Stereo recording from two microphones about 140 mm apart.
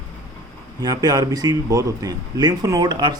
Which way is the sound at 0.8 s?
25° right (ahead or behind).